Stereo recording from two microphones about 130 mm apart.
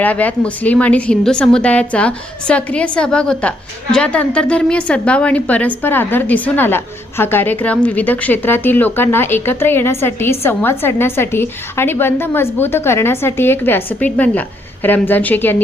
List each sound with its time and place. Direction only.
0.0 s a woman's voice: 10° left (ahead or behind)